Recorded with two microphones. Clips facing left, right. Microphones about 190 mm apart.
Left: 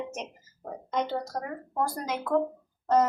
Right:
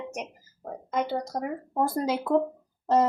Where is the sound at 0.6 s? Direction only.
Centre (ahead or behind).